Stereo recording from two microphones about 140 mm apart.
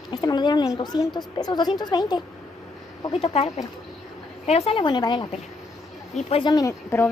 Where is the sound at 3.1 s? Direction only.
45° left (ahead or behind).